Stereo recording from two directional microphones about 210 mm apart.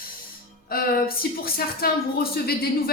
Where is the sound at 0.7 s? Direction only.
45° left (ahead or behind).